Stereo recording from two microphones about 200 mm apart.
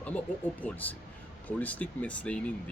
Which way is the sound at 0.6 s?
10° left (ahead or behind).